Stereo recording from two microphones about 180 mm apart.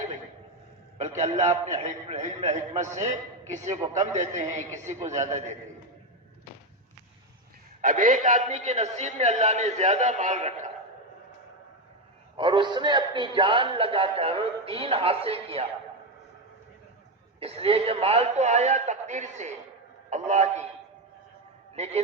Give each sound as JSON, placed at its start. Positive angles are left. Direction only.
{"t": 0.9, "sound": "a man's voice", "side_deg": -40}
{"t": 7.8, "sound": "a man's voice", "side_deg": -50}
{"t": 12.4, "sound": "a man's voice", "side_deg": -25}
{"t": 17.4, "sound": "a man's voice", "side_deg": -30}
{"t": 21.8, "sound": "a man's voice", "side_deg": -35}